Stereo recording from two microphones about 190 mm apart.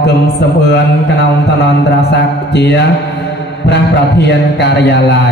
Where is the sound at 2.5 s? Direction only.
65° left (ahead or behind).